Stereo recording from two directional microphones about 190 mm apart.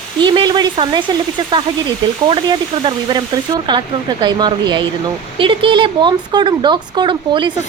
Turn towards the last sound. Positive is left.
turn(degrees=-25)  # may be behind; listen again after turning